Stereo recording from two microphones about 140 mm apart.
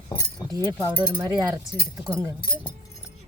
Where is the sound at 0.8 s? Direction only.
15° right (ahead or behind).